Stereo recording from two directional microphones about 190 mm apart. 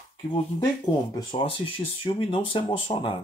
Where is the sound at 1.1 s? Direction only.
25° left (ahead or behind).